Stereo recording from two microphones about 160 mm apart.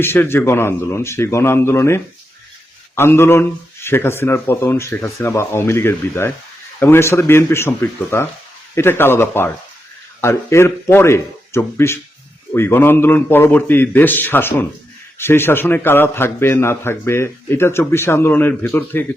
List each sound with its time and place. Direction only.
0.0 s a man's voice: 15° left (ahead or behind)